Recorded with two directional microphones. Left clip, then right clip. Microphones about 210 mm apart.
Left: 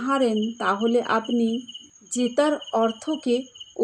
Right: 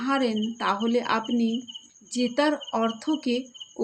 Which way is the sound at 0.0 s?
25° left (ahead or behind).